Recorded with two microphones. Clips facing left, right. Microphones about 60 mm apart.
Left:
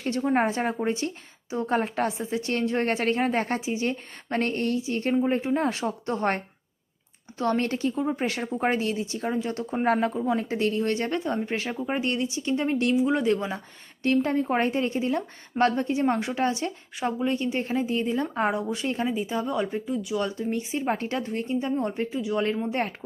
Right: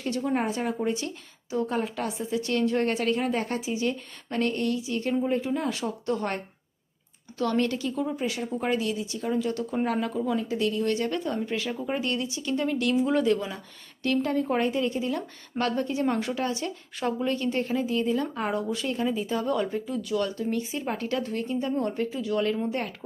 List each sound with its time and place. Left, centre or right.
0.0 s a woman's voice: left
8.1 s speech: left
8.6 s a woman's voice: left
10.3 s a woman's voice: left
19.0 s a woman's voice: centre
22.7 s a woman's voice: left